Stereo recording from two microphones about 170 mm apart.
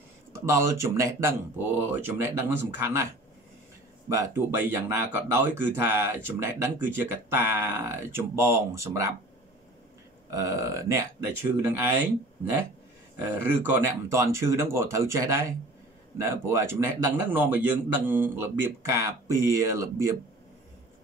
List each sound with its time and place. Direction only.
0.3 s speech: 15° right (ahead or behind)
4.1 s speech: 15° right (ahead or behind)
10.3 s speech: 20° right (ahead or behind)
13.1 s speech: 15° right (ahead or behind)